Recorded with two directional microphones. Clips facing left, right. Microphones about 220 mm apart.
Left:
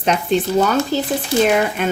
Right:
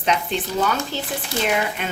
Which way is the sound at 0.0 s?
45° left (ahead or behind).